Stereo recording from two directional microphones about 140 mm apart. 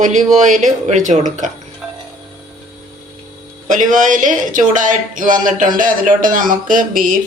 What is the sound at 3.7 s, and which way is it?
Speech, 65° right (ahead or behind).